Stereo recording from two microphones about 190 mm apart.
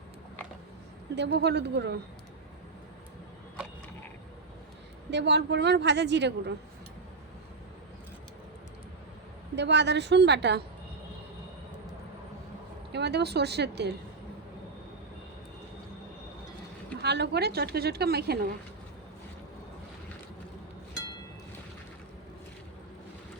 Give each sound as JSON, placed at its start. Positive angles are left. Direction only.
{"t": 1.1, "sound": "a woman's voice", "side_deg": -65}
{"t": 5.1, "sound": "a woman's voice", "side_deg": -65}
{"t": 9.6, "sound": "a woman's voice", "side_deg": -65}
{"t": 12.9, "sound": "a woman's voice", "side_deg": -60}
{"t": 17.0, "sound": "a woman's voice", "side_deg": -60}